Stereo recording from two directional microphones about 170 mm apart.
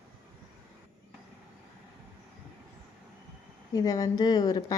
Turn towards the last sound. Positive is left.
turn(degrees=25)  # may be behind; listen again after turning